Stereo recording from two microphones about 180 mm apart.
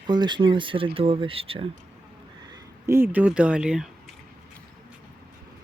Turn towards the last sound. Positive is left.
turn(degrees=-5)  # may be behind; listen again after turning